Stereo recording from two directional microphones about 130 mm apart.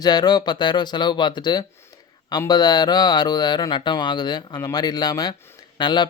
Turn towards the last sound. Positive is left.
turn(degrees=35)  # may be behind; listen again after turning